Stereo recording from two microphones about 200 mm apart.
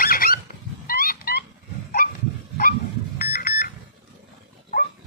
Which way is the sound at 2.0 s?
45° left (ahead or behind).